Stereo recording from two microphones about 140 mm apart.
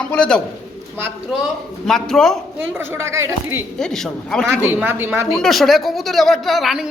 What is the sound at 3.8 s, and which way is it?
Speech, 5° left (ahead or behind).